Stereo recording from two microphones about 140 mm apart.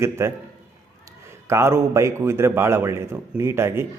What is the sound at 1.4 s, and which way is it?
A man's voice, 20° right (ahead or behind).